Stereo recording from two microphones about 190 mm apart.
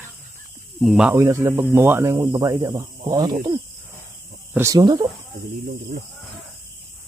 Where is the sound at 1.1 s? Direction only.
15° right (ahead or behind).